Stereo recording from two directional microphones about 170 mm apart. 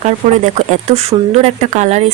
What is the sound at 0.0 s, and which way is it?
Speech, 45° right (ahead or behind).